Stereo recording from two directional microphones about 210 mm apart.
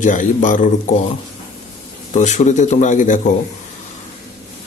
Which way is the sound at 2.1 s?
35° left (ahead or behind).